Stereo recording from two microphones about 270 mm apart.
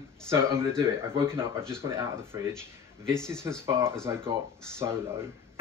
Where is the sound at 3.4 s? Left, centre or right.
Centre.